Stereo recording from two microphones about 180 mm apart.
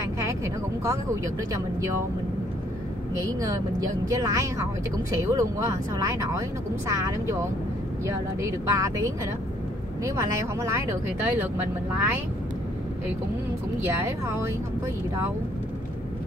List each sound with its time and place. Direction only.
0.0 s vehicle: 15° right (ahead or behind)
0.8 s speech: 15° right (ahead or behind)
3.2 s a woman's voice: 20° right (ahead or behind)
8.1 s speech: 15° right (ahead or behind)
13.8 s speech: 15° right (ahead or behind)